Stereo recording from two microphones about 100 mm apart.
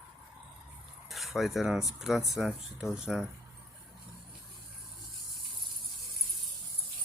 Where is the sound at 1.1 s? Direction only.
Centre (ahead or behind).